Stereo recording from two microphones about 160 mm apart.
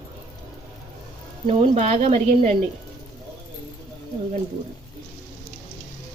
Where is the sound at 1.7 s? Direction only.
45° right (ahead or behind).